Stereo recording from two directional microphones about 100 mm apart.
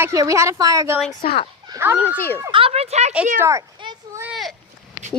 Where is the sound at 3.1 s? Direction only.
15° right (ahead or behind).